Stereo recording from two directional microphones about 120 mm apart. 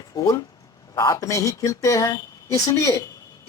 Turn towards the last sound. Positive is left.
turn(degrees=25)  # may be behind; listen again after turning